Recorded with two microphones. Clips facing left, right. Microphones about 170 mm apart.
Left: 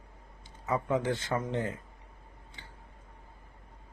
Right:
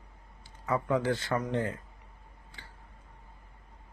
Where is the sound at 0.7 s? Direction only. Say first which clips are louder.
Right 1 dB; 20° left (ahead or behind).